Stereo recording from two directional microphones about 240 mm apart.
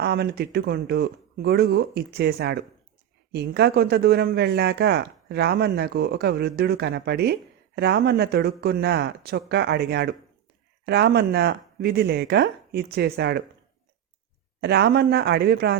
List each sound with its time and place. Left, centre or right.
0.0 s speech: right
14.6 s speech: right